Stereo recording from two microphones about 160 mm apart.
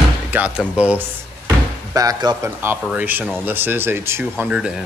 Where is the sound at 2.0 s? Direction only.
20° right (ahead or behind); by 4.8 s 5° right (ahead or behind).